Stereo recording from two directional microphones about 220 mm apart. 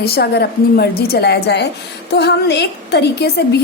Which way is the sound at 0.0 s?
45° left (ahead or behind).